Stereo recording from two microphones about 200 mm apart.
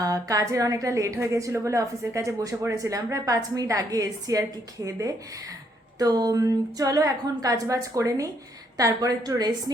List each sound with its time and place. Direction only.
0.0 s a woman's voice: 15° right (ahead or behind)